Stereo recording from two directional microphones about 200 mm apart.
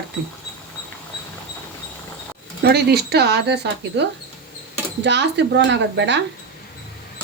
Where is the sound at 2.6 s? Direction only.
55° right (ahead or behind).